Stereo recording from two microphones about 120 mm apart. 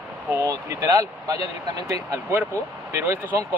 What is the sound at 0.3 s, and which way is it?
Speech, 20° right (ahead or behind).